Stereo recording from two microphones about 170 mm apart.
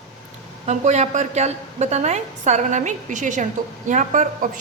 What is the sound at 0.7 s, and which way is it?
A woman's voice, 40° right (ahead or behind).